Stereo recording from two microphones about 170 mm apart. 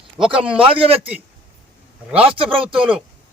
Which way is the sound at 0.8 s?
35° right (ahead or behind).